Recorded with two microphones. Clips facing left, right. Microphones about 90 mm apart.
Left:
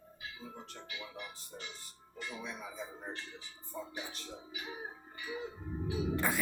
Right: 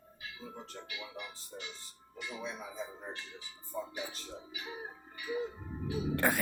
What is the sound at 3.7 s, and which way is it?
Speech, 10° right (ahead or behind).